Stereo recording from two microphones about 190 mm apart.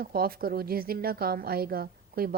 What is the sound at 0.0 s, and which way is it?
A woman's voice, 50° right (ahead or behind).